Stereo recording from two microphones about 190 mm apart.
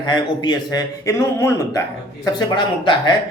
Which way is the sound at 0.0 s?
25° left (ahead or behind).